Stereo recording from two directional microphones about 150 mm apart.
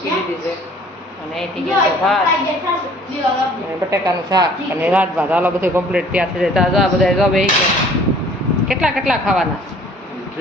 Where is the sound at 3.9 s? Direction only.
20° right (ahead or behind).